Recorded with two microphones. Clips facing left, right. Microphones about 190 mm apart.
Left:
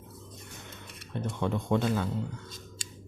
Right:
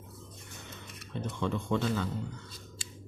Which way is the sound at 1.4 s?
15° left (ahead or behind).